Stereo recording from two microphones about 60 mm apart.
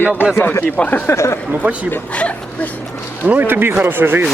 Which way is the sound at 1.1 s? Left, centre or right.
Left.